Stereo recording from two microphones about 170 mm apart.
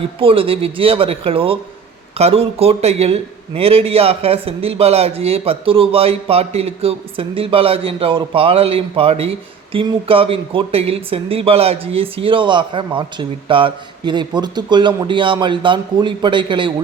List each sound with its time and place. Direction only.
0.2 s a man's voice: 35° right (ahead or behind)